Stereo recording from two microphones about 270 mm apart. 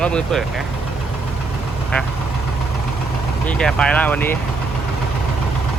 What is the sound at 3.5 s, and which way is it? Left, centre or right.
Speech, centre.